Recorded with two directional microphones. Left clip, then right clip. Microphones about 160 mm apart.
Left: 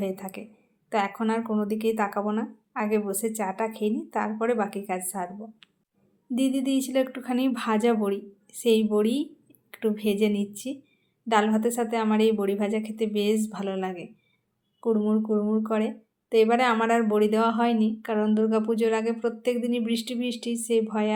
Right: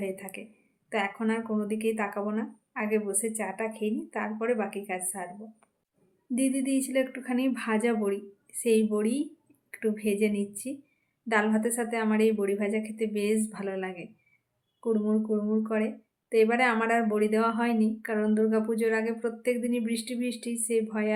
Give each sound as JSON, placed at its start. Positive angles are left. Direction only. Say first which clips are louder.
{"t": 0.0, "sound": "a woman's voice", "louder": "left 3 dB", "side_deg": 20}
{"t": 6.3, "sound": "a woman's voice", "louder": "left 2 dB", "side_deg": 15}